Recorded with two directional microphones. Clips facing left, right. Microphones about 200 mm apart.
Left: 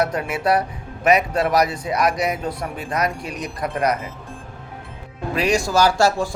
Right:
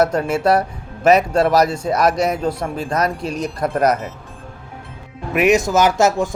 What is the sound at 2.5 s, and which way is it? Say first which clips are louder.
Speech: right 5 dB; 25° right (ahead or behind).